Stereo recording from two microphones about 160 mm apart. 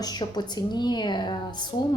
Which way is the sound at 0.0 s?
25° left (ahead or behind).